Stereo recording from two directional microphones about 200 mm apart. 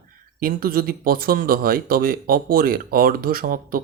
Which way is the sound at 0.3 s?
45° right (ahead or behind).